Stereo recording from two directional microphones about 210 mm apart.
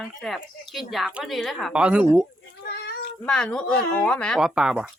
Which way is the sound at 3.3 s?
5° left (ahead or behind).